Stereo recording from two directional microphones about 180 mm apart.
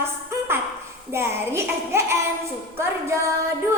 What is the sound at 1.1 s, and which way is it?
A woman's voice, 15° right (ahead or behind).